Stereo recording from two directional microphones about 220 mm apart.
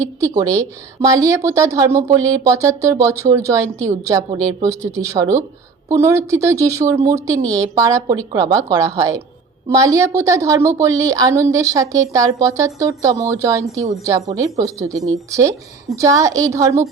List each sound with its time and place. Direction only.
0.2 s speech: 15° right (ahead or behind)